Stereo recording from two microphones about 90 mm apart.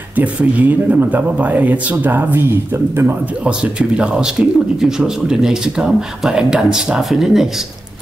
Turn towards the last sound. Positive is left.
turn(degrees=-5)  # may be behind; listen again after turning